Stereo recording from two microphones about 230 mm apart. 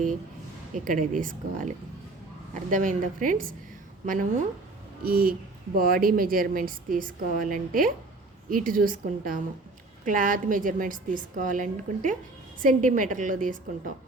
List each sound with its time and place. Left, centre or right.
0.7 s a woman's voice: right